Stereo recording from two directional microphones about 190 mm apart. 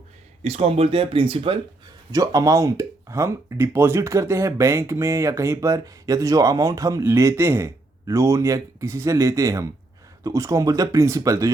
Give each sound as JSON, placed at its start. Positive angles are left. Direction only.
{"t": 0.4, "sound": "speech", "side_deg": -30}